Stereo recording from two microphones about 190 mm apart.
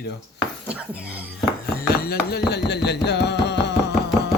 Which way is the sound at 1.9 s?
55° left (ahead or behind).